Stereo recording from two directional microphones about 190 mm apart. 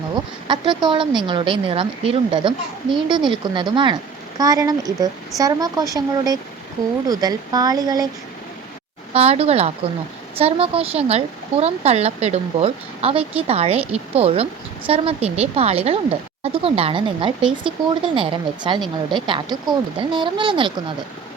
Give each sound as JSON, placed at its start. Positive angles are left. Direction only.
{"t": 0.4, "sound": "speech", "side_deg": -25}
{"t": 9.1, "sound": "a woman's voice", "side_deg": -35}